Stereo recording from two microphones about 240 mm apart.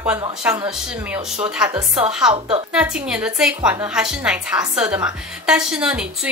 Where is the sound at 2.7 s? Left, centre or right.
Centre.